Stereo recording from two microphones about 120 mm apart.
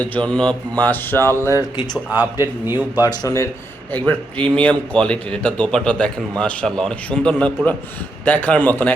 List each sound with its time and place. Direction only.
0.0 s mantra: 10° left (ahead or behind)
2.0 s a man's voice: 15° right (ahead or behind)
3.0 s speech: 30° left (ahead or behind)
3.9 s mantra: 15° left (ahead or behind)